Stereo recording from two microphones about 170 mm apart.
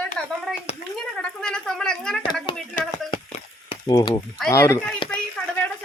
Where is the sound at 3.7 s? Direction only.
25° left (ahead or behind).